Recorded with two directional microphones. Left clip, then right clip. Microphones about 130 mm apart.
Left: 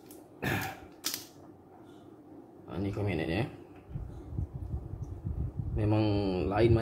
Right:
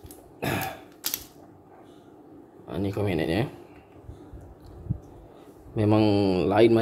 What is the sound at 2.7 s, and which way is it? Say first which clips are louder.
Speech: right 7 dB; 75° right (ahead or behind).